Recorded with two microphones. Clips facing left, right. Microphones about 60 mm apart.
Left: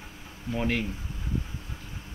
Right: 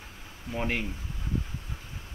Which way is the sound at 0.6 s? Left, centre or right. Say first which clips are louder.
Left 2 dB; centre.